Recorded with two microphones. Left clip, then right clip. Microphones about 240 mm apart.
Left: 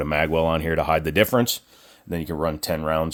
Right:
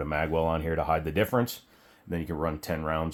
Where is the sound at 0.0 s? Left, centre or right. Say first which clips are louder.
Left 6 dB; left.